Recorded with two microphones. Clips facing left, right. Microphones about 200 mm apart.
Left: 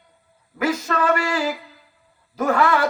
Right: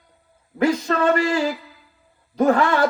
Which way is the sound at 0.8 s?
30° right (ahead or behind).